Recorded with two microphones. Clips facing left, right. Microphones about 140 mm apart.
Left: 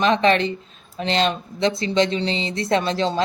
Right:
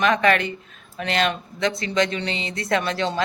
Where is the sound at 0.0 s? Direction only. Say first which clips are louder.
Left 2 dB; 30° left (ahead or behind).